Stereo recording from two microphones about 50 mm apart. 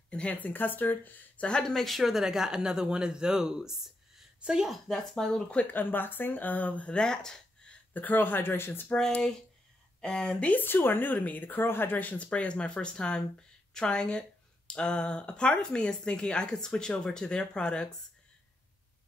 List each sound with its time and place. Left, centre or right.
0.1 s speech: left
0.4 s speech: left
1.4 s speech: centre
4.6 s speech: centre
5.5 s speech: left
6.9 s speech: centre
7.9 s speech: left
9.9 s a sound: centre
10.2 s speech: left
10.6 s speech: left
12.3 s speech: left